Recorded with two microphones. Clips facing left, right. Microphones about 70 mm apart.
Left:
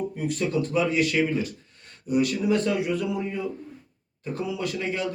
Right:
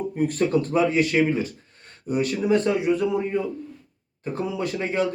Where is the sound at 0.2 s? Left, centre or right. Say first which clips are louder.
Right 6 dB; right.